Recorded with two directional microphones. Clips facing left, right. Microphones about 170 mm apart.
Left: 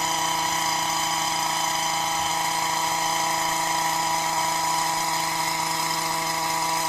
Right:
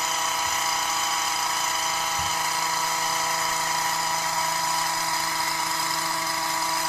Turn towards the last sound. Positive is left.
turn(degrees=20)  # may be behind; listen again after turning